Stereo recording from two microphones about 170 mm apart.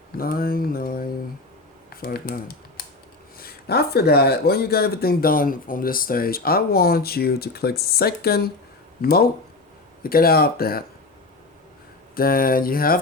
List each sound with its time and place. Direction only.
0.2 s speech: 60° left (ahead or behind)
12.1 s speech: 60° left (ahead or behind)